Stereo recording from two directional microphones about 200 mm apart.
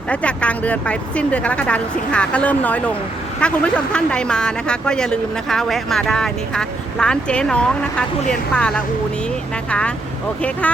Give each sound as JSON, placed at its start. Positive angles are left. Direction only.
{"t": 0.1, "sound": "speech", "side_deg": 5}